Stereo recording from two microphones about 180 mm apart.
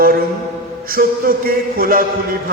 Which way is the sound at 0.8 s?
55° right (ahead or behind).